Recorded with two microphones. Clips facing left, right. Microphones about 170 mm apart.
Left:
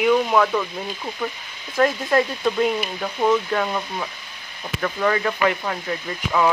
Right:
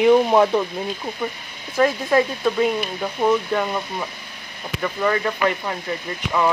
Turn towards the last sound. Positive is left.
turn(degrees=0)  # may be behind; listen again after turning